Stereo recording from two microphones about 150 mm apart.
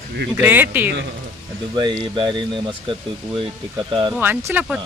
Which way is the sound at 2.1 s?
30° right (ahead or behind).